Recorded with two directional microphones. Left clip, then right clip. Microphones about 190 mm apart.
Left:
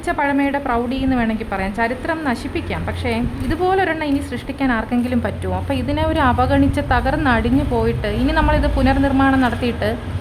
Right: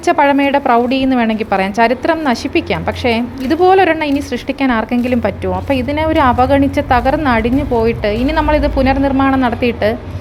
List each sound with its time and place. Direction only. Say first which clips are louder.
0.0 s a woman's voice: right 8 dB; 25° right (ahead or behind)